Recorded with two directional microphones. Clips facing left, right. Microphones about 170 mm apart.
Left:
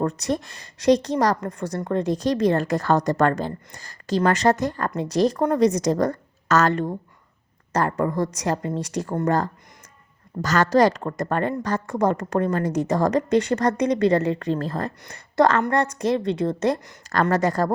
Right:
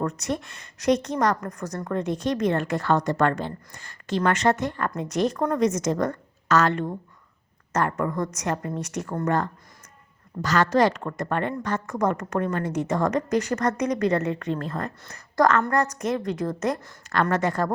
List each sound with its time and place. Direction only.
0.0 s a woman's voice: 35° left (ahead or behind)